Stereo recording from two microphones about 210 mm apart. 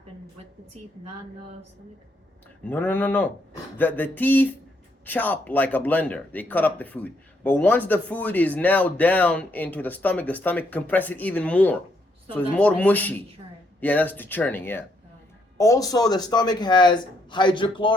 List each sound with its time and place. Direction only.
2.6 s speech: 10° left (ahead or behind)